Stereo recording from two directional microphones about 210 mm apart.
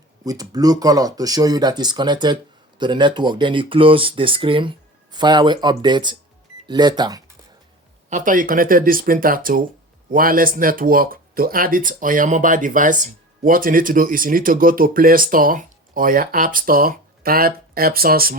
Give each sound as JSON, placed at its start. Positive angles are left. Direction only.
{"t": 0.3, "sound": "speech", "side_deg": -15}
{"t": 8.1, "sound": "speech", "side_deg": -40}